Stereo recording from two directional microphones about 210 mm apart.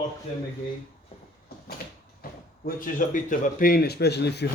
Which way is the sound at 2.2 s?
45° left (ahead or behind).